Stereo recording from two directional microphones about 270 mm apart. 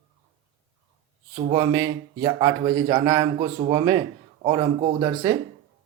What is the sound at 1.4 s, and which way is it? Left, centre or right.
Speech, centre.